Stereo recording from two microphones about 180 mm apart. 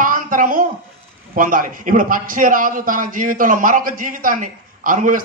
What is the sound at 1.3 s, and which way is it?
A man's voice, 50° right (ahead or behind).